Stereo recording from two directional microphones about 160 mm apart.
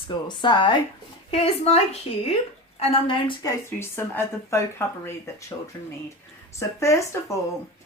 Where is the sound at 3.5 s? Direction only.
15° left (ahead or behind).